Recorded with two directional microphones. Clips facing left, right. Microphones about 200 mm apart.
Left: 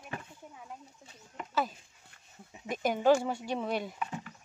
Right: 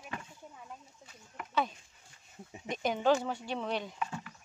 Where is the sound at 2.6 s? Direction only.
5° left (ahead or behind).